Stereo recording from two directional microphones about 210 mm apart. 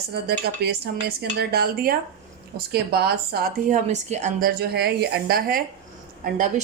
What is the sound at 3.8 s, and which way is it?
A woman's voice, 35° right (ahead or behind).